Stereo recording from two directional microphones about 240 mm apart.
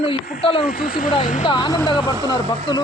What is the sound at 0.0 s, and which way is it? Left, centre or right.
Speech, left.